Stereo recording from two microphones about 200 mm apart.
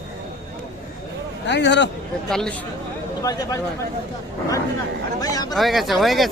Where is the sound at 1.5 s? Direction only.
60° left (ahead or behind).